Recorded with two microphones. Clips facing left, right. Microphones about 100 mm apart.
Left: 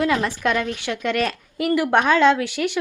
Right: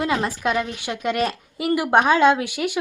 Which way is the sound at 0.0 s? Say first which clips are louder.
Left 2 dB; 20° right (ahead or behind).